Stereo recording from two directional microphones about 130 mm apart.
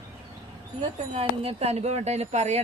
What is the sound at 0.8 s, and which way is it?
Speech, 50° right (ahead or behind).